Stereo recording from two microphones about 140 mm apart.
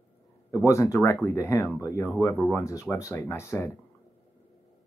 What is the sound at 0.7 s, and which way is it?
Speech, 20° left (ahead or behind).